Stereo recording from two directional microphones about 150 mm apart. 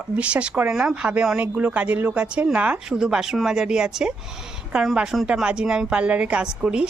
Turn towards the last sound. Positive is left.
turn(degrees=-5)  # may be behind; listen again after turning